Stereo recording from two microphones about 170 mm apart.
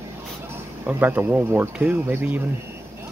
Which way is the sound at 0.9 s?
10° right (ahead or behind).